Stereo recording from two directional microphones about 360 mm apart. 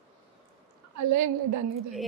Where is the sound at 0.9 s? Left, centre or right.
Right.